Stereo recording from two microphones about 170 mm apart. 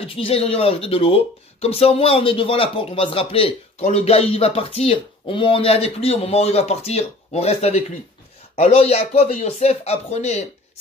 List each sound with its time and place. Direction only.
0.0 s speech: 35° left (ahead or behind)